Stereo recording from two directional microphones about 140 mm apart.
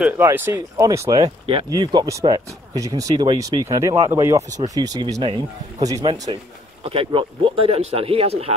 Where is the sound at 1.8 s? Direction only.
30° right (ahead or behind).